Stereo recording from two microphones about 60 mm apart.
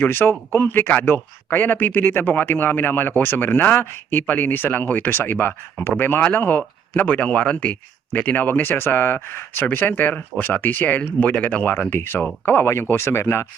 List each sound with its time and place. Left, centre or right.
0.0 s speech: left